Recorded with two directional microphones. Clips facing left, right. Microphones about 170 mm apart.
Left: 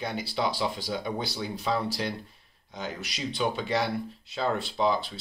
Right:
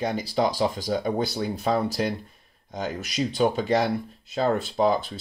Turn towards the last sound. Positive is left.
turn(degrees=-45)  # may be behind; listen again after turning